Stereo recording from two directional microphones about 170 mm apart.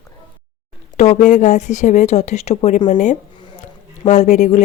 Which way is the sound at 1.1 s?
50° left (ahead or behind).